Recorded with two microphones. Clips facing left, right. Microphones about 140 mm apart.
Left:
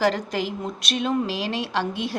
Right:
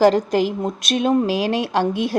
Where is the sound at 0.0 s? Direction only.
35° right (ahead or behind).